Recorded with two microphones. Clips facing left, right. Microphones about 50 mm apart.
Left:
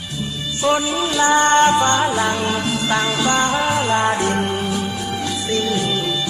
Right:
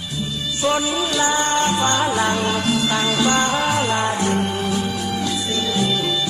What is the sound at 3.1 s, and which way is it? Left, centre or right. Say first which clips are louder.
Music: left 1 dB; centre.